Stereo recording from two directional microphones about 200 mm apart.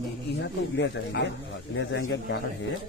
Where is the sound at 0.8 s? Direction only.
60° left (ahead or behind).